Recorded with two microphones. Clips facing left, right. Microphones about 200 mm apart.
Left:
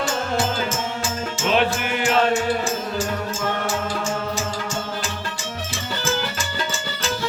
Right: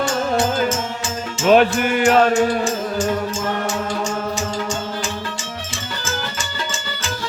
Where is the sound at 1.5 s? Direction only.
50° right (ahead or behind).